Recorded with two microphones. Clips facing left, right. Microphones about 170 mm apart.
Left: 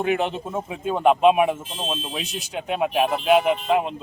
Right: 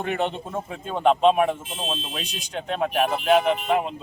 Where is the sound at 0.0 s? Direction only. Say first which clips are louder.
Left 3 dB; 5° left (ahead or behind).